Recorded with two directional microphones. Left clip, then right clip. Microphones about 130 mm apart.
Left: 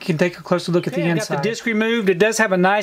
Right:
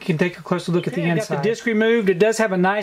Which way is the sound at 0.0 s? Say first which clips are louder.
Left 2 dB; 30° left (ahead or behind).